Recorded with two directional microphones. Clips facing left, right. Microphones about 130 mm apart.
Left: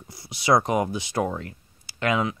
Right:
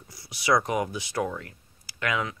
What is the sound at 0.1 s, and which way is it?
Speech, 25° left (ahead or behind).